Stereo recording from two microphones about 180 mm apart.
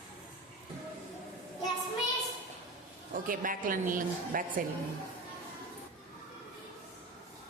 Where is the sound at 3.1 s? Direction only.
50° right (ahead or behind).